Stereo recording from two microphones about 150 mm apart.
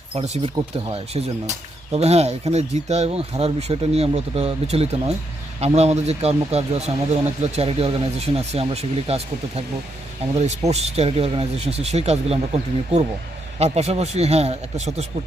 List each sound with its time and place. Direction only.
0.2 s speech: 35° right (ahead or behind)
10.7 s speech: 45° right (ahead or behind)